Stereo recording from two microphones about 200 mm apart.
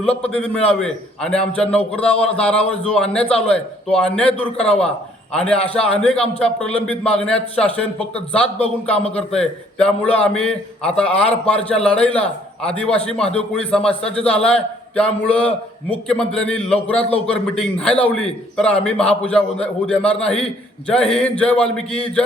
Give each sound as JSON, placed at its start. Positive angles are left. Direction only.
{"t": 0.0, "sound": "a man's voice", "side_deg": 5}
{"t": 3.2, "sound": "a man's voice", "side_deg": 30}
{"t": 3.5, "sound": "a man's voice", "side_deg": 5}